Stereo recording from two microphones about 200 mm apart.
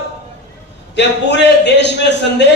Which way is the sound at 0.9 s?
60° left (ahead or behind).